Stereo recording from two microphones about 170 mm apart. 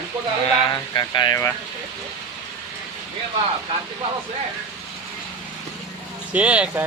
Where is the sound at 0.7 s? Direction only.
25° left (ahead or behind).